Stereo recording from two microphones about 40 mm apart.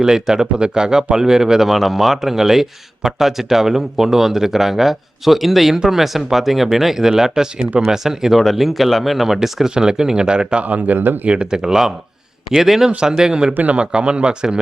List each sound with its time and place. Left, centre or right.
0.0 s speech: centre
8.4 s speech: centre; by 10.6 s right
10.6 s speech: right
10.9 s speech: right
11.3 s speech: centre
13.5 s speech: right
13.7 s speech: right